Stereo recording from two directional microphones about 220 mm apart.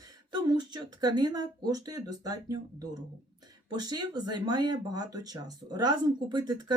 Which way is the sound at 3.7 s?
20° right (ahead or behind).